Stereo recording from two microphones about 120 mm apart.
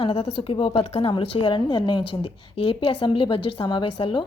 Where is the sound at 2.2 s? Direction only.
50° left (ahead or behind).